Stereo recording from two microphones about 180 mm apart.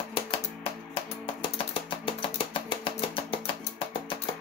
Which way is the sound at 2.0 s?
30° left (ahead or behind).